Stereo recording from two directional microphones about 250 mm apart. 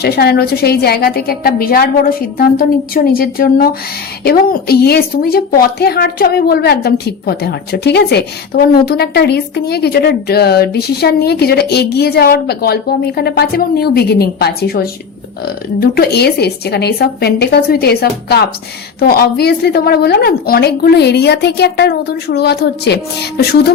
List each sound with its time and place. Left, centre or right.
0.0 s a woman's voice: left